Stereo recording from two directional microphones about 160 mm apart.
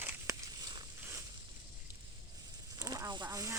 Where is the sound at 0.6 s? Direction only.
25° right (ahead or behind).